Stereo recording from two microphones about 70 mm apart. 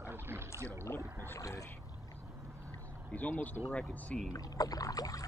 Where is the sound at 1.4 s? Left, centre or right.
Left.